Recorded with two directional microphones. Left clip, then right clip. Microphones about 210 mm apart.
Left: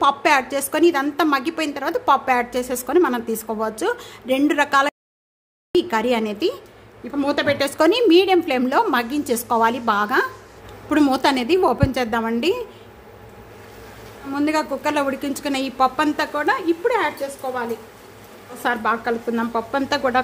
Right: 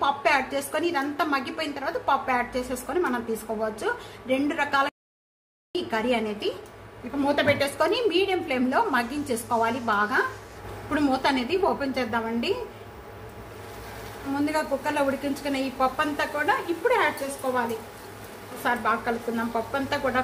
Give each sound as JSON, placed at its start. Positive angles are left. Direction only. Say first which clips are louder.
{"t": 0.0, "sound": "a woman's voice", "louder": "left 6 dB", "side_deg": 55}
{"t": 14.4, "sound": "a woman's voice", "louder": "left 6 dB", "side_deg": 50}
{"t": 18.6, "sound": "a woman's voice", "louder": "left 4 dB", "side_deg": 50}